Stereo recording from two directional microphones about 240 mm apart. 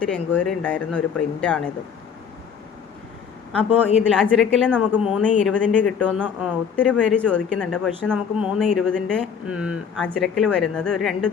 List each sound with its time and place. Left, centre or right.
0.0 s a woman's voice: centre
4.1 s a woman's voice: centre
6.1 s speech: centre
6.7 s a woman's voice: centre